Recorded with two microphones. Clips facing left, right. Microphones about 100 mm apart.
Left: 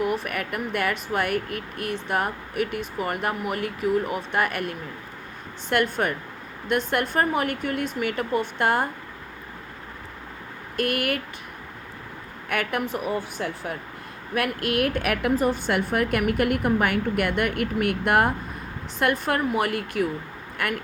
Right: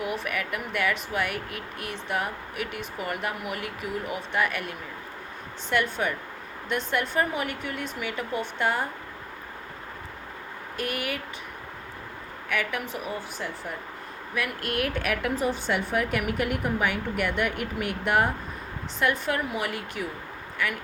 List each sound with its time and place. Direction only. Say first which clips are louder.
0.2 s a woman's voice: left 2 dB; 45° left (ahead or behind)
10.8 s a woman's voice: left 6 dB; 55° left (ahead or behind)
12.5 s a woman's voice: left 4 dB; 50° left (ahead or behind)
14.3 s a woman's voice: left 5 dB; 60° left (ahead or behind)